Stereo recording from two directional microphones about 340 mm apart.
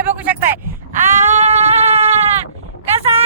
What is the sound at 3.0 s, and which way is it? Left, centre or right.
Vehicle, centre.